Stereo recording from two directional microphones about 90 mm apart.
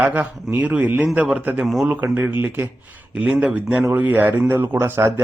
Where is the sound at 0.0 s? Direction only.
15° right (ahead or behind).